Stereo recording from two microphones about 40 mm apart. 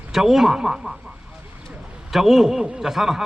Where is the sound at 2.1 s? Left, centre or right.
Centre.